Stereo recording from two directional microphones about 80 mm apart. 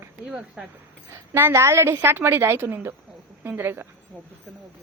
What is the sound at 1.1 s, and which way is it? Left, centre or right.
A woman's voice, right.